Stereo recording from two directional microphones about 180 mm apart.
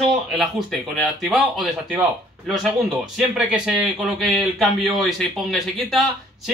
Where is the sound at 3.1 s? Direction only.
5° right (ahead or behind).